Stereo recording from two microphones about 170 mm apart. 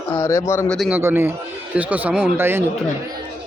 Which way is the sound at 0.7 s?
Centre (ahead or behind).